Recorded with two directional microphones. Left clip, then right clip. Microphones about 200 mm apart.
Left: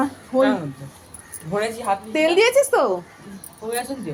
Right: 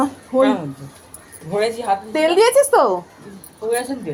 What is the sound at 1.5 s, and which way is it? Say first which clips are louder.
Speech: right 3 dB; 40° right (ahead or behind).